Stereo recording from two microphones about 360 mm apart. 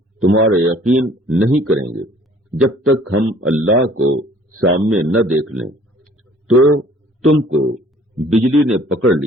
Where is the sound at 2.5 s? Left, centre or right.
Right.